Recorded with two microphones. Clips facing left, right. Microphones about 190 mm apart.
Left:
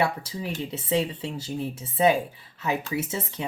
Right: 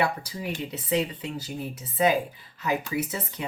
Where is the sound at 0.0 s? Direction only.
25° left (ahead or behind).